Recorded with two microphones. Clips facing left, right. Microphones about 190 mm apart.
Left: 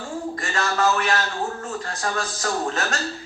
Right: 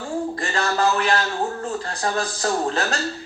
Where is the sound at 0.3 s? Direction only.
35° right (ahead or behind).